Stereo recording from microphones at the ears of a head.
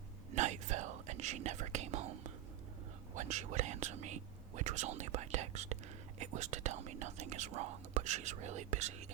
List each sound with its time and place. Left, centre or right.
0.3 s whispering: right
6.1 s speech: right